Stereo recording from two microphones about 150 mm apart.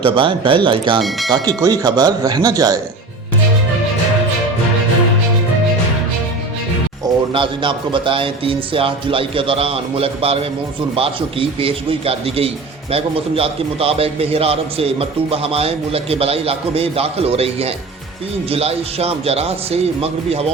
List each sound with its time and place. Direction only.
0.0 s a man's voice: 35° right (ahead or behind)
7.3 s a man's voice: 35° right (ahead or behind)